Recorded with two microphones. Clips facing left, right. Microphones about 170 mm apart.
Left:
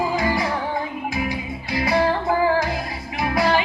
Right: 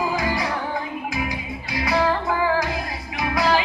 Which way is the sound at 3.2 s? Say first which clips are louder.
Left 2 dB; 25° left (ahead or behind).